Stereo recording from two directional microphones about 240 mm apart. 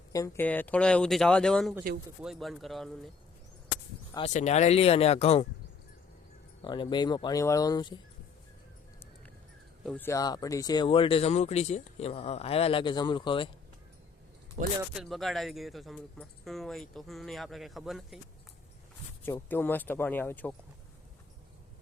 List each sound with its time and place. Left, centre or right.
0.1 s speech: centre
4.1 s speech: left
6.6 s speech: centre
9.8 s speech: centre
14.8 s speech: centre
19.2 s speech: centre